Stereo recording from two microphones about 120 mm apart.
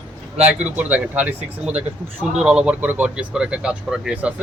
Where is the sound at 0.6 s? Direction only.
10° right (ahead or behind).